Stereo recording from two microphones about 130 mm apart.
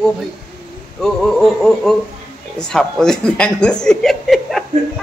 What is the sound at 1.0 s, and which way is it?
Speech, centre (ahead or behind).